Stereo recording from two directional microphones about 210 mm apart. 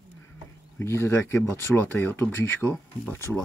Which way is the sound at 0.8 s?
10° left (ahead or behind).